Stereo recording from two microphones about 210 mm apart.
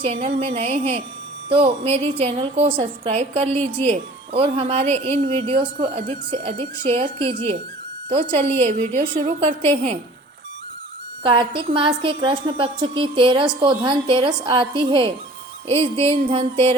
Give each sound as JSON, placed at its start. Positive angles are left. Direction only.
{"t": 0.0, "sound": "a woman's voice", "side_deg": -30}
{"t": 8.3, "sound": "a woman's voice", "side_deg": -30}
{"t": 11.2, "sound": "a woman's voice", "side_deg": -25}